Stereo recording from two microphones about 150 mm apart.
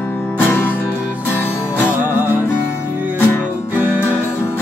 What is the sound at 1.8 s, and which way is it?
Music, 10° right (ahead or behind).